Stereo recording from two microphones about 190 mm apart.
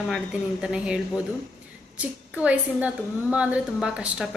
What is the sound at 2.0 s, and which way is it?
A woman's voice, 5° right (ahead or behind).